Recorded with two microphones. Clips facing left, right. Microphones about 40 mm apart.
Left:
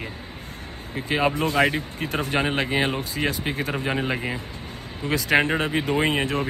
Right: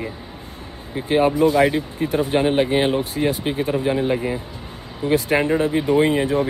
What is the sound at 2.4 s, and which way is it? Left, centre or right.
Speech, left.